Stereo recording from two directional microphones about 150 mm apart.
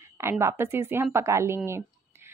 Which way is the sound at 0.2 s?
20° right (ahead or behind).